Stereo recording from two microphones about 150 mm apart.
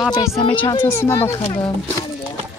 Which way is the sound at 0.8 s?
15° left (ahead or behind).